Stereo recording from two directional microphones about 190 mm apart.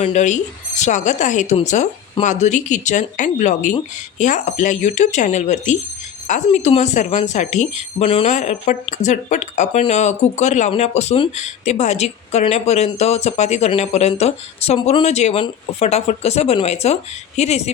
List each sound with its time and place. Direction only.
0.0 s speech: 40° left (ahead or behind)